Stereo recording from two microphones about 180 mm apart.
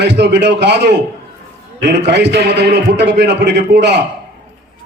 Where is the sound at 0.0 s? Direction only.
70° right (ahead or behind).